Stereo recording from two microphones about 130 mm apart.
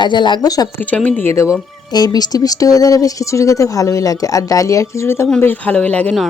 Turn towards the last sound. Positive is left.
turn(degrees=10)  # may be behind; listen again after turning